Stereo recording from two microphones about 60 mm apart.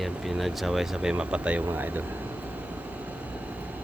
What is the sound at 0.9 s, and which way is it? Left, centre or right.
Vehicle, right.